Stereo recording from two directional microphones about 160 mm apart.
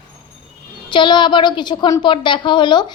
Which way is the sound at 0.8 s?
30° left (ahead or behind).